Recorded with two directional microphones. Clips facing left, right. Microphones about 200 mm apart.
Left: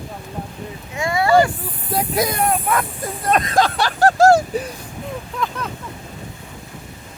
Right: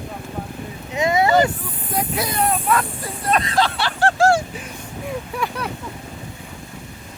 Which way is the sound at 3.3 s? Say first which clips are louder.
Left 2 dB; 45° left (ahead or behind).